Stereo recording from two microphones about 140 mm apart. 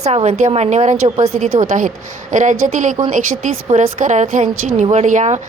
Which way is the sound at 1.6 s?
70° right (ahead or behind).